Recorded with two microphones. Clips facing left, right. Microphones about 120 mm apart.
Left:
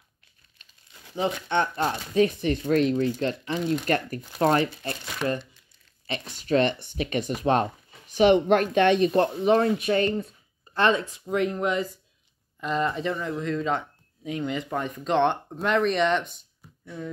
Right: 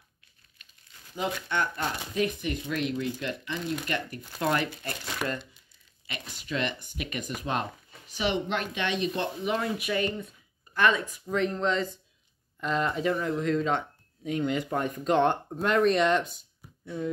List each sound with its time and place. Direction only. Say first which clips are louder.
1.1 s speech: left 5 dB; 25° left (ahead or behind); by 4.2 s 45° left (ahead or behind)
4.4 s speech: left 6 dB; 35° left (ahead or behind)
6.3 s speech: left 9 dB; 40° left (ahead or behind); by 11.9 s 10° left (ahead or behind)
12.5 s speech: left 2 dB; centre (ahead or behind)